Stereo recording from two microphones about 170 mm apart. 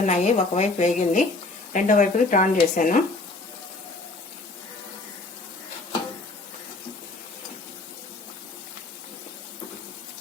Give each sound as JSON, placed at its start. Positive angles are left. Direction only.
{"t": 0.0, "sound": "speech", "side_deg": 45}